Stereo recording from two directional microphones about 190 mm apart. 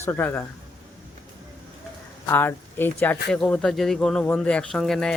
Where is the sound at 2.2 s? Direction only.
10° left (ahead or behind).